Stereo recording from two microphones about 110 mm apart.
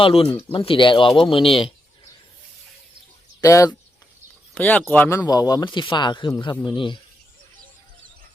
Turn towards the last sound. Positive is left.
turn(degrees=45)  # may be behind; listen again after turning